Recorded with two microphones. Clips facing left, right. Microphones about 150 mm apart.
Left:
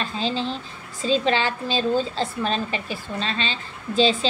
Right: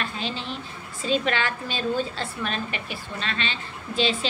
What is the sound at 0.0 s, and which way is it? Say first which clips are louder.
A woman's voice: left 5 dB; 30° left (ahead or behind).